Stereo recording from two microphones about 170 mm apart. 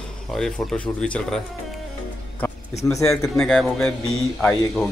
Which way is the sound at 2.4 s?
10° left (ahead or behind).